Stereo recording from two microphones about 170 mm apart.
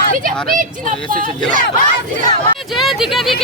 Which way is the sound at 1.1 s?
50° right (ahead or behind).